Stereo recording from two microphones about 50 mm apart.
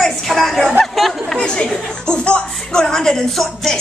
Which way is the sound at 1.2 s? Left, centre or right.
Centre.